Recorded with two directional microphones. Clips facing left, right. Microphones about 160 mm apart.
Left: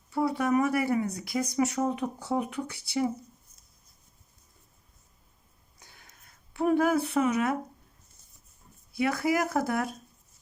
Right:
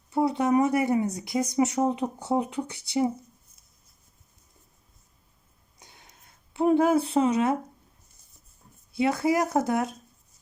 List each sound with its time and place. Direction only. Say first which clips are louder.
0.1 s speech: right 3 dB; 20° right (ahead or behind)
5.8 s a sound: right 3 dB; 20° right (ahead or behind)
8.9 s speech: right 3 dB; 25° right (ahead or behind)